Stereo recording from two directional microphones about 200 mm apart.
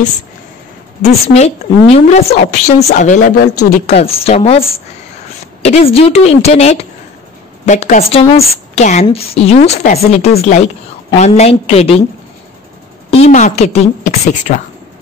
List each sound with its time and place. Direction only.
1.3 s a woman's voice: 30° left (ahead or behind)
3.8 s a woman's voice: 30° left (ahead or behind)
13.2 s a woman's voice: 35° left (ahead or behind)